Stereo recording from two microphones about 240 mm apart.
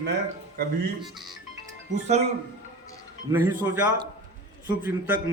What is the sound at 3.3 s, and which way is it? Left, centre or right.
A man's voice, centre.